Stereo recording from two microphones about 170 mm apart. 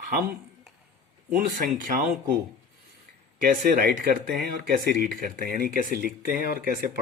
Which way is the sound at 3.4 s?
55° right (ahead or behind).